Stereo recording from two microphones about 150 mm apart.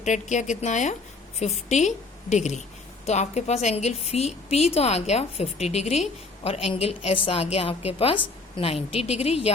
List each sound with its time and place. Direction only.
0.0 s a woman's voice: 55° left (ahead or behind)